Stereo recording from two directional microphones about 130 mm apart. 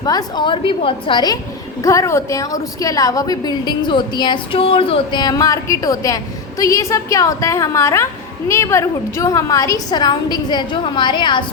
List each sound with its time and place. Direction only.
0.0 s a woman's voice: 30° left (ahead or behind)
1.8 s a woman's voice: 25° left (ahead or behind); by 5.2 s 45° left (ahead or behind)
5.2 s a woman's voice: 25° left (ahead or behind)